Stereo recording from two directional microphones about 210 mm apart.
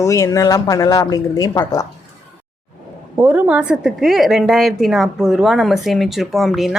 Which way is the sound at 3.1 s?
10° right (ahead or behind).